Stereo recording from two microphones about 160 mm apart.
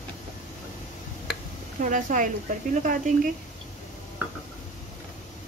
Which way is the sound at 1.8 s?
55° right (ahead or behind).